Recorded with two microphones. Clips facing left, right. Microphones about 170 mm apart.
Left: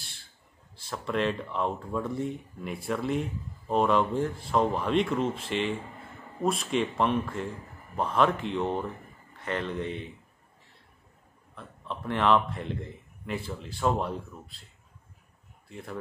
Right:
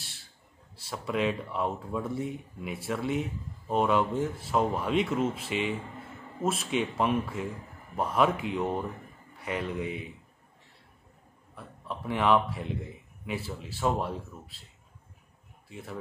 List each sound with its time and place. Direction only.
0.7 s a man's voice: 5° right (ahead or behind)
11.5 s speech: 5° right (ahead or behind)
15.7 s speech: 5° right (ahead or behind)